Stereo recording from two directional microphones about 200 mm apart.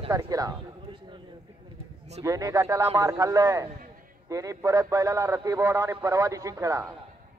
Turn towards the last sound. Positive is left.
turn(degrees=-15)  # may be behind; listen again after turning